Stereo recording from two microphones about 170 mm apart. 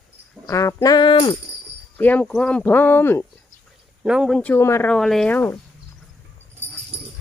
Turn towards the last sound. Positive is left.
turn(degrees=10)  # may be behind; listen again after turning